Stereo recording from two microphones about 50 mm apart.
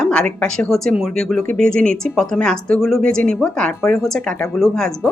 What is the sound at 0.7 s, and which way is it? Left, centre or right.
A woman's voice, centre.